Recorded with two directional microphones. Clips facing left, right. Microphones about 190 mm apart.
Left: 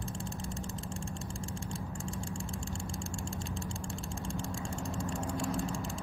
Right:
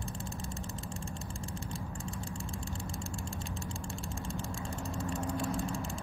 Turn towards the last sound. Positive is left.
turn(degrees=0)  # may be behind; listen again after turning